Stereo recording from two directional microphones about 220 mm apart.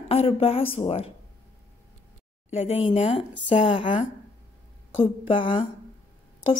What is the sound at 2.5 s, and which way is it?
A woman's voice, 25° left (ahead or behind).